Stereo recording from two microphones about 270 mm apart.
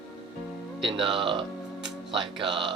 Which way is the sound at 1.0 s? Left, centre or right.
Centre.